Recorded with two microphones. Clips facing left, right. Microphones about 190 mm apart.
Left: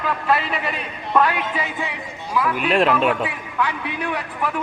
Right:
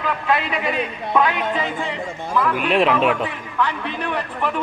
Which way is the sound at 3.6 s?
10° left (ahead or behind).